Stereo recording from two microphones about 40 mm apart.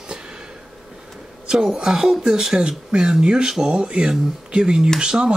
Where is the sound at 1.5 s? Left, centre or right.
Centre.